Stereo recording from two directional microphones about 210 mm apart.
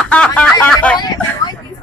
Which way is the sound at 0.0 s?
5° left (ahead or behind).